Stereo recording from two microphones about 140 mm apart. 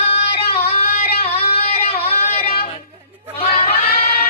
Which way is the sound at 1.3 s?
45° left (ahead or behind).